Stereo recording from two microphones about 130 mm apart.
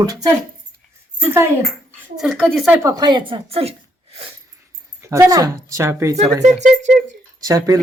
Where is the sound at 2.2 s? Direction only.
5° left (ahead or behind).